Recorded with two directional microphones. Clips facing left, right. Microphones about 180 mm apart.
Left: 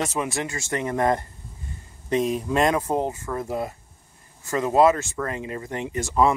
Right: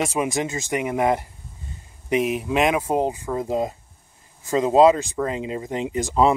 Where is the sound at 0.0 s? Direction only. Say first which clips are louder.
Right 3 dB; 15° right (ahead or behind).